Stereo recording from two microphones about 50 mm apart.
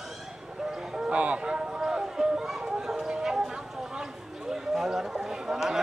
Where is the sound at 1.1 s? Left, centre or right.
Right.